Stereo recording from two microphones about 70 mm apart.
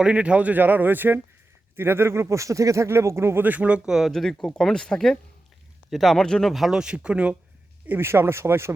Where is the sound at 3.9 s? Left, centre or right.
Centre.